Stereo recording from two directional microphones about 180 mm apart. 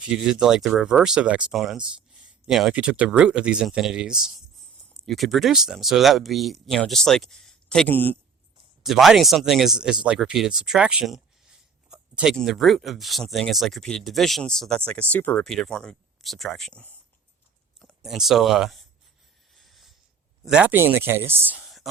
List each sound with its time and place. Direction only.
0.0 s speech: 5° right (ahead or behind)
8.8 s speech: centre (ahead or behind)
19.5 s a sound: centre (ahead or behind)
20.4 s speech: 5° right (ahead or behind)